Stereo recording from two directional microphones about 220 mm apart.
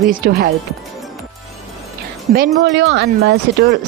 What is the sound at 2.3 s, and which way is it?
Speech, 45° right (ahead or behind).